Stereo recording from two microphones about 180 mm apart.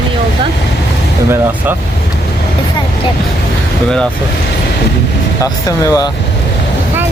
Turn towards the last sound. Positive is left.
turn(degrees=20)  # may be behind; listen again after turning